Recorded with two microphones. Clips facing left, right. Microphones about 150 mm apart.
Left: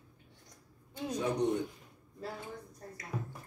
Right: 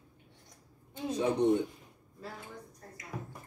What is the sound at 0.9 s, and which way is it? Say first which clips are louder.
Speech: right 3 dB; 25° right (ahead or behind).